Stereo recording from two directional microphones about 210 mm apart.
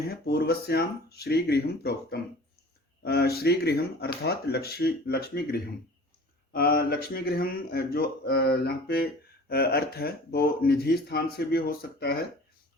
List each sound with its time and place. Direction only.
0.1 s speech: 50° left (ahead or behind)